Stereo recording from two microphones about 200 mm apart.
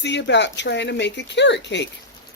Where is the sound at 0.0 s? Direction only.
60° left (ahead or behind).